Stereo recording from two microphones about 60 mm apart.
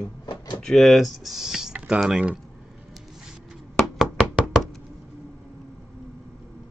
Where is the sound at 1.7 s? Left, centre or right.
Right.